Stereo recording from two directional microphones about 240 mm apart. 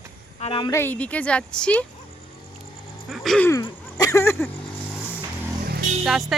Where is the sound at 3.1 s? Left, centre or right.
Centre.